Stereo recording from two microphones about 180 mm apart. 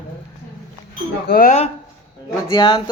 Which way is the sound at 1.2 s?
55° left (ahead or behind).